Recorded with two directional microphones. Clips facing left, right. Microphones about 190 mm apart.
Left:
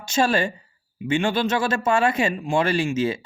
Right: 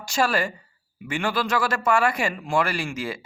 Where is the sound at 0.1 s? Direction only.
25° left (ahead or behind).